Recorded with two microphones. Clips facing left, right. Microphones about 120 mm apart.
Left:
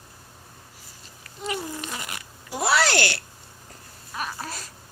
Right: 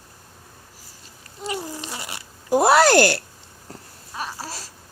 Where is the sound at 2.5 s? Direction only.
50° right (ahead or behind).